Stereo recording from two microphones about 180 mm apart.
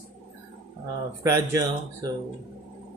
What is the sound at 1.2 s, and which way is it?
Speech, 15° right (ahead or behind).